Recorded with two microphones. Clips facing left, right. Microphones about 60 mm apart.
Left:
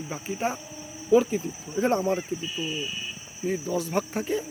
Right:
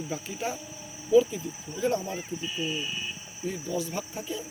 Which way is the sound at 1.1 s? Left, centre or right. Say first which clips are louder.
Left 1 dB; left.